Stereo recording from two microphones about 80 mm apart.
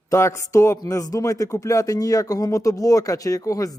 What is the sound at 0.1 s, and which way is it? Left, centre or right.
Speech, left.